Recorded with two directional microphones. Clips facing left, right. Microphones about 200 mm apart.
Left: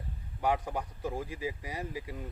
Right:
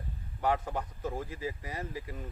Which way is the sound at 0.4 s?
15° left (ahead or behind).